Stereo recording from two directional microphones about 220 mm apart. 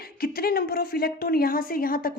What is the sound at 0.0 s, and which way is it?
A woman's voice, 45° left (ahead or behind).